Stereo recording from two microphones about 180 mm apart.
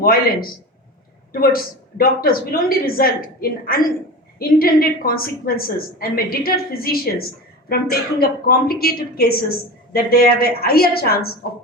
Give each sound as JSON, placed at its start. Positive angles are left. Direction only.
{"t": 1.3, "sound": "a woman's voice", "side_deg": 55}